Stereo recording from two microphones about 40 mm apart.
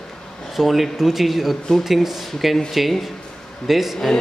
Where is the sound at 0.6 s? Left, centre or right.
Centre.